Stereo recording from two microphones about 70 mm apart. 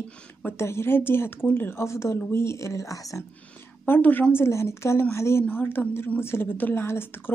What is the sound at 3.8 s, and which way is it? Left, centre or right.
Speech, left.